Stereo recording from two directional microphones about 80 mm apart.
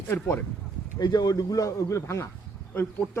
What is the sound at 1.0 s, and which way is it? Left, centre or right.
A man's voice, left.